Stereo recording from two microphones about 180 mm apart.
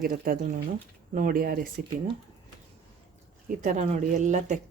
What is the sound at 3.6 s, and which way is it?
Speech, 45° right (ahead or behind).